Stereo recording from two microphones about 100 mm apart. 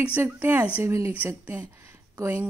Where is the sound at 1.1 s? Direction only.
20° right (ahead or behind).